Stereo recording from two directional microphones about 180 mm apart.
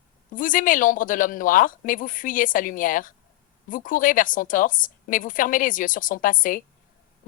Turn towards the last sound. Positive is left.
turn(degrees=50)  # may be behind; listen again after turning